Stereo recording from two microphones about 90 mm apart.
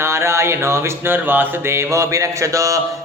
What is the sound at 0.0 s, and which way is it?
Music, 30° right (ahead or behind).